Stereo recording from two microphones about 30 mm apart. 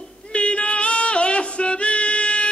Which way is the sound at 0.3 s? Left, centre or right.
Left.